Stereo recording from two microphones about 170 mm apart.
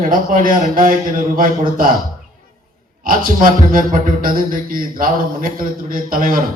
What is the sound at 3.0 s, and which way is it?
A man's voice, 55° right (ahead or behind).